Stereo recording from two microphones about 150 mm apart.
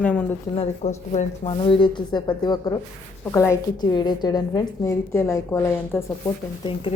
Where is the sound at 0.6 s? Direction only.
45° left (ahead or behind); by 4.6 s 30° left (ahead or behind).